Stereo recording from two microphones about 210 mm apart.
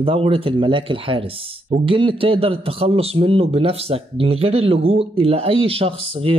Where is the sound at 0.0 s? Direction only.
25° right (ahead or behind).